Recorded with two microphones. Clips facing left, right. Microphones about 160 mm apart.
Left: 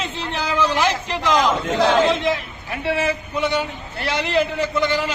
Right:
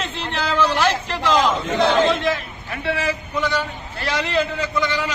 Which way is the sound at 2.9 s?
25° left (ahead or behind).